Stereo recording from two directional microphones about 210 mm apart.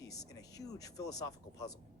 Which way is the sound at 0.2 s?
15° left (ahead or behind).